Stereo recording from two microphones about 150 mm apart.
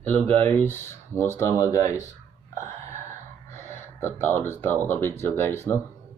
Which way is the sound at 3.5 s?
15° left (ahead or behind).